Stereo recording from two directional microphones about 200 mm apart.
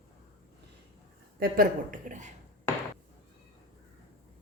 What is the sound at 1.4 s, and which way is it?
Speech, 45° right (ahead or behind).